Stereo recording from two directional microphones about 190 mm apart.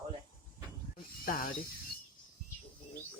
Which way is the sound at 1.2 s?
50° left (ahead or behind).